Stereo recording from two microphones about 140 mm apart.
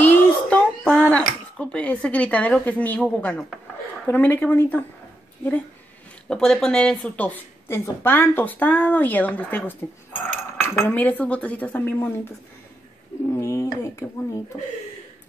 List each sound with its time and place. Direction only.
0.0 s child singing: 10° left (ahead or behind)
1.2 s speech: 10° left (ahead or behind)
6.2 s speech: 5° left (ahead or behind); by 14.4 s 20° left (ahead or behind)